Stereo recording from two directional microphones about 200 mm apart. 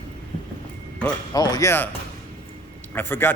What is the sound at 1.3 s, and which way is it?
Speech, 20° left (ahead or behind).